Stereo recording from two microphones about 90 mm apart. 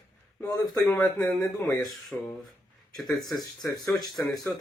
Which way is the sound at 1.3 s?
40° left (ahead or behind).